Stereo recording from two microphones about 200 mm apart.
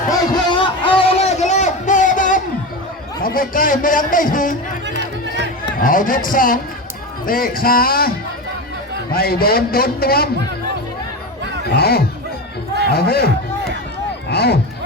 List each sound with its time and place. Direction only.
0.1 s a sound: 25° left (ahead or behind); by 2.4 s 40° left (ahead or behind)
3.2 s a man's voice: 45° left (ahead or behind)
4.9 s music: 60° right (ahead or behind)
5.8 s a man's voice: 45° left (ahead or behind)
9.1 s a man's voice: 50° left (ahead or behind)
11.8 s a man's voice: 50° left (ahead or behind)
14.3 s a sound: 55° left (ahead or behind)